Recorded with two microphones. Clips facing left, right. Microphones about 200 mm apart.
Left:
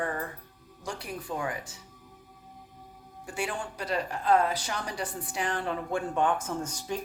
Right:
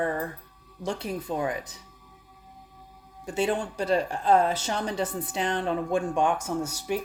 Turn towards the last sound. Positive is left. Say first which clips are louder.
# right 4 dB
turn(degrees=-10)  # may be behind; listen again after turning